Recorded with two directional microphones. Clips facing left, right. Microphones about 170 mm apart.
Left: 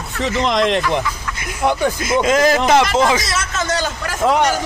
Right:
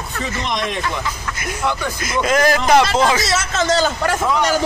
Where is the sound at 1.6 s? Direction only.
50° left (ahead or behind).